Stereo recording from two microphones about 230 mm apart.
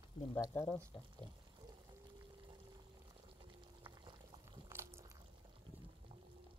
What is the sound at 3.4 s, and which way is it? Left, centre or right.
Boiling, right.